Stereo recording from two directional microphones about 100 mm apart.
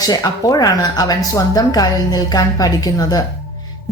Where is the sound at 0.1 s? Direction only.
40° left (ahead or behind).